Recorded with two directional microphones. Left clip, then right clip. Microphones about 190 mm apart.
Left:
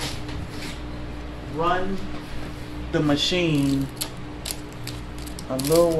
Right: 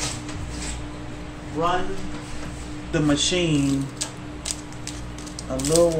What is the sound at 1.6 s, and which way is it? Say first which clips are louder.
Speech: even; 25° left (ahead or behind).